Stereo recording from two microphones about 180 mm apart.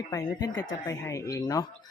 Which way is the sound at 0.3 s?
20° left (ahead or behind).